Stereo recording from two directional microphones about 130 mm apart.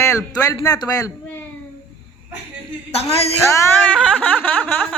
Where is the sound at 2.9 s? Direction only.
50° left (ahead or behind).